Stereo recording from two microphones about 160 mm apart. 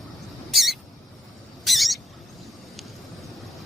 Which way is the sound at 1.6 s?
Centre (ahead or behind).